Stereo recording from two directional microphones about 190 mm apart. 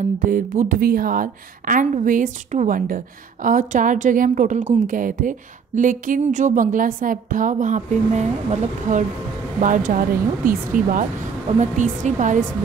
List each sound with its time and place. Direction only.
0.2 s a woman's voice: 45° right (ahead or behind)